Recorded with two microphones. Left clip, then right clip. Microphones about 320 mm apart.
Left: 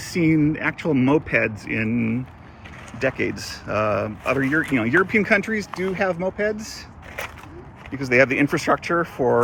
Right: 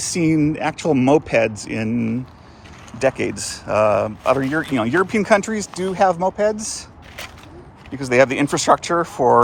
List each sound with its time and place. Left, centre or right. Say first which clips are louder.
0.0 s speech: right 2 dB; centre
7.9 s speech: right 2 dB; centre